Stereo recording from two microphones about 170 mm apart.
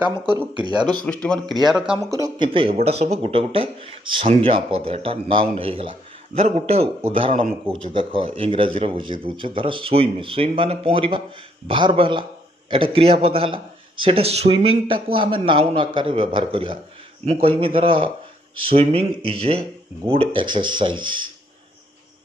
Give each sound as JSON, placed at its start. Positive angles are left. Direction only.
{"t": 0.6, "sound": "speech", "side_deg": -25}
{"t": 1.0, "sound": "a man's voice", "side_deg": 5}
{"t": 2.0, "sound": "speech", "side_deg": -20}